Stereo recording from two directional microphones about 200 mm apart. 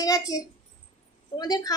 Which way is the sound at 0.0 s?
20° left (ahead or behind).